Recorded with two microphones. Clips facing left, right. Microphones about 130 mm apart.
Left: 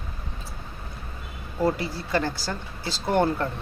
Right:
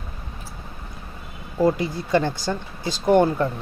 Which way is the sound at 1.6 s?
20° right (ahead or behind).